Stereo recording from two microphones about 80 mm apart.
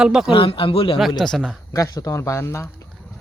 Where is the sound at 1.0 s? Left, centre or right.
Centre.